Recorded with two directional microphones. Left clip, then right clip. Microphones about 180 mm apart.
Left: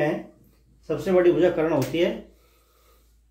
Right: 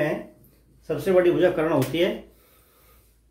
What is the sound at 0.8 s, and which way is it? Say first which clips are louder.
Speech: even; 15° left (ahead or behind).